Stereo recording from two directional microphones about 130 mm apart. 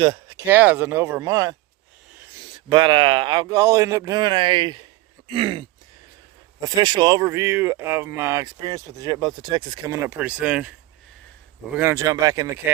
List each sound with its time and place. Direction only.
0.0 s speech: 35° right (ahead or behind)
0.3 s speech: 15° right (ahead or behind)
2.6 s speech: 35° right (ahead or behind)
6.7 s speech: 30° right (ahead or behind)
9.9 s speech: 20° right (ahead or behind)